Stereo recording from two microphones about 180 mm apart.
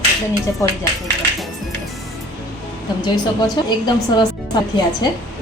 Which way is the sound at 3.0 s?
25° left (ahead or behind).